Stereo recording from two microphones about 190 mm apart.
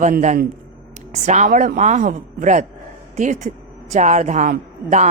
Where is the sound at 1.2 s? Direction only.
40° right (ahead or behind).